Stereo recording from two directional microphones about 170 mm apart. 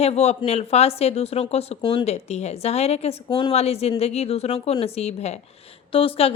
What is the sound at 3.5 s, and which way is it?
A woman's voice, 40° left (ahead or behind).